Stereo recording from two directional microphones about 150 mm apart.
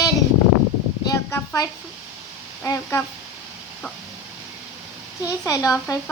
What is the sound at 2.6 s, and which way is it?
Child singing, 20° left (ahead or behind).